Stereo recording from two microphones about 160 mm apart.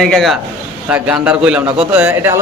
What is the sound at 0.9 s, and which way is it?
Speech, 10° right (ahead or behind).